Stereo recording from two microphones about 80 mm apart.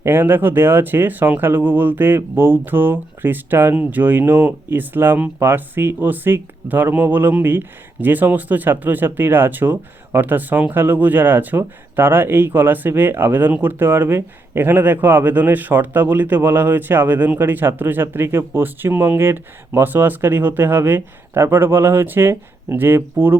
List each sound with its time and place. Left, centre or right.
0.0 s speech: right